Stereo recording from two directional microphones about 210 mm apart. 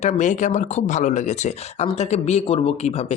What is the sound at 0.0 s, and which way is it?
Speech, 35° left (ahead or behind).